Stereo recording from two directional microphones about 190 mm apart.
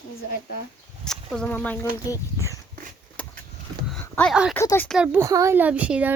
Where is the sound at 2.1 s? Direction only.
15° left (ahead or behind).